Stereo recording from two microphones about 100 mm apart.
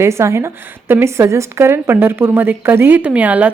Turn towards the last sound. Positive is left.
turn(degrees=-15)  # may be behind; listen again after turning